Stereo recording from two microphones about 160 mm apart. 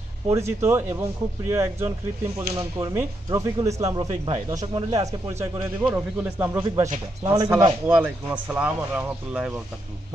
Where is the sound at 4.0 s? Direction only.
30° right (ahead or behind).